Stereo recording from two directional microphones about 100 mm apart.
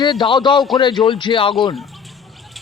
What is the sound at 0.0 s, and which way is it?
Speech, 45° left (ahead or behind).